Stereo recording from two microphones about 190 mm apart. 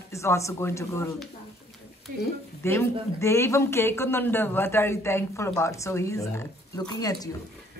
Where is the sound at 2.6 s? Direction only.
15° left (ahead or behind).